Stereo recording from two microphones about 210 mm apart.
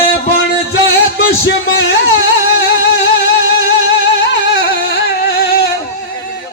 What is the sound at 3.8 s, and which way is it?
Music, 50° left (ahead or behind).